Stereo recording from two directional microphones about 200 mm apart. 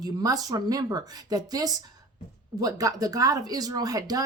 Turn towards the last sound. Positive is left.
turn(degrees=-20)  # may be behind; listen again after turning